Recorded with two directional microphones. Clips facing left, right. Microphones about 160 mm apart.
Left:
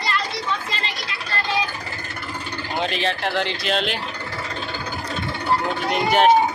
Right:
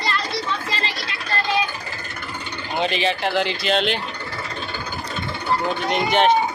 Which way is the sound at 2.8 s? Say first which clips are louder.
Right 2 dB; centre (ahead or behind).